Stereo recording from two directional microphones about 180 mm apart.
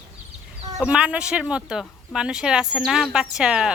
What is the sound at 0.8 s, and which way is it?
Speech, 5° right (ahead or behind).